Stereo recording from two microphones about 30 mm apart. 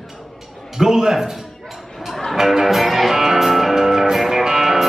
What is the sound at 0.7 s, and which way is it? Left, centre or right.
Speech, centre.